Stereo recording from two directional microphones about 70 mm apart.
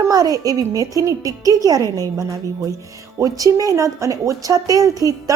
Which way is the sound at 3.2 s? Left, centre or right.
Right.